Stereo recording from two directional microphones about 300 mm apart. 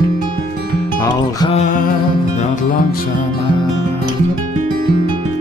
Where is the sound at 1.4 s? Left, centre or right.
Left.